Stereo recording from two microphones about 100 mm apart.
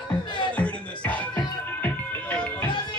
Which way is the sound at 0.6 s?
15° left (ahead or behind).